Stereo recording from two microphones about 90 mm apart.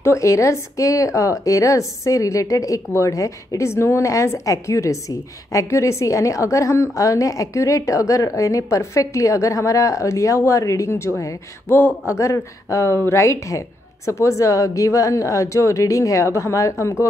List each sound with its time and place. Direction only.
0.0 s a woman's voice: 35° left (ahead or behind)